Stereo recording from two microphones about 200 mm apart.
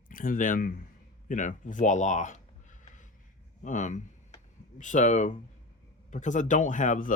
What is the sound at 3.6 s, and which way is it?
Speech, 35° left (ahead or behind).